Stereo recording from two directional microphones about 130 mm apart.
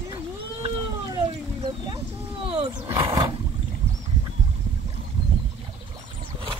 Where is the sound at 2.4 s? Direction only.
45° right (ahead or behind).